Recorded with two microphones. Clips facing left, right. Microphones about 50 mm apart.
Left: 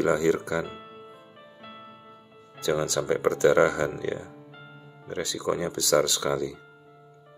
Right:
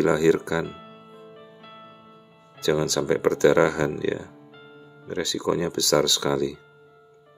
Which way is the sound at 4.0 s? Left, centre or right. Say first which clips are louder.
Right 4 dB; right.